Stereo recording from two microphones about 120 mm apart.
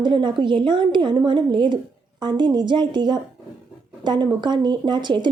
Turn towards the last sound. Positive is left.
turn(degrees=-40)  # may be behind; listen again after turning